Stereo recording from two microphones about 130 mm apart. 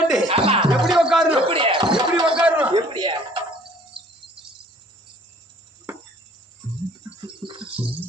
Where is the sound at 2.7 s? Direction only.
35° right (ahead or behind).